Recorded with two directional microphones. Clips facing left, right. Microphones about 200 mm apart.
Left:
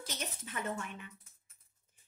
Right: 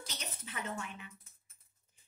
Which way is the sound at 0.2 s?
45° left (ahead or behind).